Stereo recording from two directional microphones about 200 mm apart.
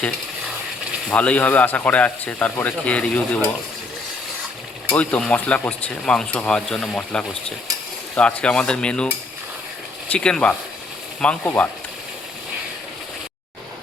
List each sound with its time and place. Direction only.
1.1 s a man's voice: 5° left (ahead or behind)
4.9 s a man's voice: 5° left (ahead or behind)